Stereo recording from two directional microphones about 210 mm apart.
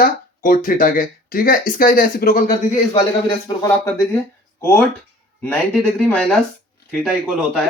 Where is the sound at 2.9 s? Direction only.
20° left (ahead or behind).